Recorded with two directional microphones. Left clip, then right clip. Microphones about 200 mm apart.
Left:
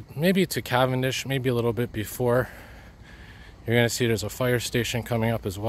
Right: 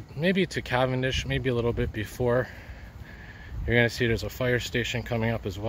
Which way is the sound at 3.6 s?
25° left (ahead or behind).